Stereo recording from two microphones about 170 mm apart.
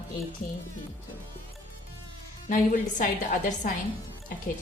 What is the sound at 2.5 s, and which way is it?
A woman's voice, 50° left (ahead or behind).